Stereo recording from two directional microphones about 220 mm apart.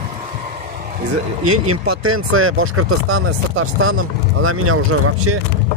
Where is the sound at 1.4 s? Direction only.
70° right (ahead or behind).